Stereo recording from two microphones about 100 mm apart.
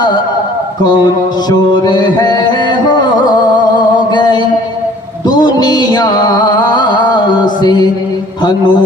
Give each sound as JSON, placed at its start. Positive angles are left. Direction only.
{"t": 1.5, "sound": "music", "side_deg": 45}
{"t": 4.1, "sound": "music", "side_deg": 45}
{"t": 7.4, "sound": "mantra", "side_deg": 45}